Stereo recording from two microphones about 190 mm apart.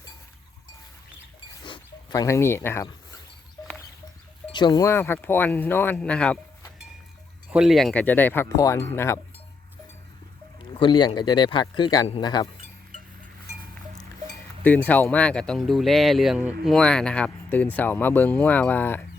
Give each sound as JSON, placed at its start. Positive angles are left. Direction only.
{"t": 1.6, "sound": "dog", "side_deg": 25}
{"t": 4.5, "sound": "speech", "side_deg": 25}
{"t": 7.5, "sound": "speech", "side_deg": 0}
{"t": 10.8, "sound": "speech", "side_deg": 25}
{"t": 14.6, "sound": "speech", "side_deg": 10}